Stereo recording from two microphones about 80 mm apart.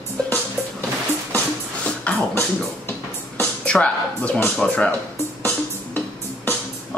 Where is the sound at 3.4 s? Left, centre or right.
Centre.